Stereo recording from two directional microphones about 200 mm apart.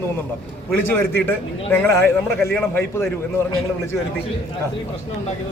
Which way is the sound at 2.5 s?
10° left (ahead or behind).